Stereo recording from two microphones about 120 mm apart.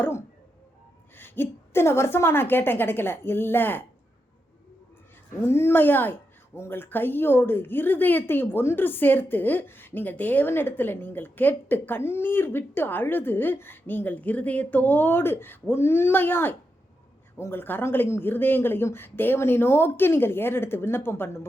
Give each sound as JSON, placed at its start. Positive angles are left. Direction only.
{"t": 0.0, "sound": "a sound", "side_deg": 20}
{"t": 1.1, "sound": "a woman's voice", "side_deg": 15}
{"t": 5.4, "sound": "a woman's voice", "side_deg": 20}